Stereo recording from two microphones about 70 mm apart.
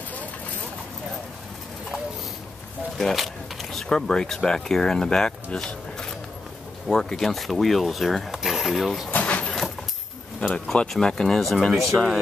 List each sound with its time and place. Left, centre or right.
3.0 s speech: centre
9.1 s vehicle: centre
10.5 s speech: centre